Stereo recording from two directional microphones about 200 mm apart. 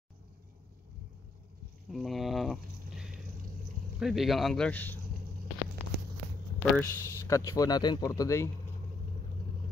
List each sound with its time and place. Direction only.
1.9 s a sound: centre (ahead or behind)
4.0 s speech: centre (ahead or behind)
6.6 s speech: 10° left (ahead or behind)